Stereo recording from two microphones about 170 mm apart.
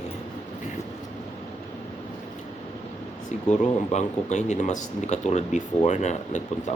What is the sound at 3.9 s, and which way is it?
Speech, 45° left (ahead or behind).